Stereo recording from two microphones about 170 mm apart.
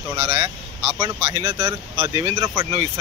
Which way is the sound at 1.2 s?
30° right (ahead or behind).